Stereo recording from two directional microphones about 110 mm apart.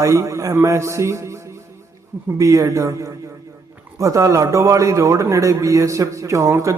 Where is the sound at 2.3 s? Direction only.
30° right (ahead or behind).